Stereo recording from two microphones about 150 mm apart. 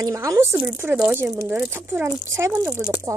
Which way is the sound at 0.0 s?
20° right (ahead or behind).